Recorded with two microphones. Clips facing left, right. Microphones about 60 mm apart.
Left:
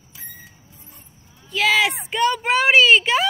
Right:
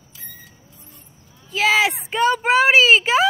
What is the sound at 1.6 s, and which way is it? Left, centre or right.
Speech, centre.